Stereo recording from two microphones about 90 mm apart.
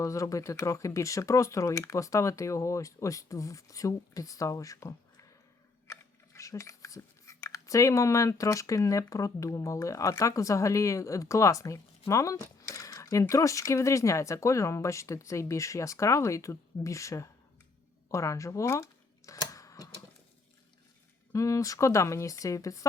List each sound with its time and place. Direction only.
0.0 s speech: 35° left (ahead or behind)
18.1 s a sound: 35° left (ahead or behind)
21.3 s speech: 35° left (ahead or behind)